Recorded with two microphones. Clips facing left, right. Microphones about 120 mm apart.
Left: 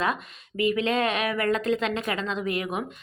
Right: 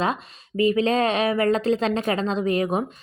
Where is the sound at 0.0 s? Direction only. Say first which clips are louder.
Right 3 dB; 30° right (ahead or behind).